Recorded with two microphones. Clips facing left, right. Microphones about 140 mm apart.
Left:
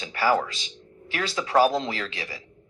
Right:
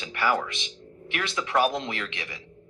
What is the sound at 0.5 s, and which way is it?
Music, 25° right (ahead or behind).